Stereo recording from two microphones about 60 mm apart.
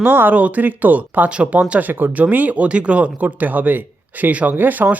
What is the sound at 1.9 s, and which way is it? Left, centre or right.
Speech, right.